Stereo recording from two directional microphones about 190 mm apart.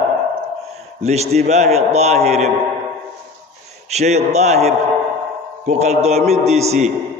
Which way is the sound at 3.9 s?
35° right (ahead or behind).